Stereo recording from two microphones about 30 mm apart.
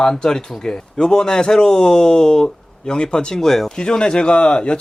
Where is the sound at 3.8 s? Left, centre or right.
Left.